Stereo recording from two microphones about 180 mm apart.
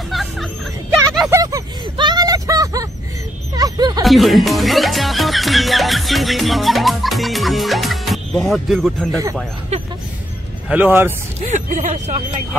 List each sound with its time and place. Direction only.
0.1 s music: centre (ahead or behind)
1.3 s a sound: 20° right (ahead or behind)
3.5 s dog: 20° right (ahead or behind)
4.0 s music: centre (ahead or behind)
10.7 s speech: 10° right (ahead or behind)
11.4 s speech: 45° right (ahead or behind)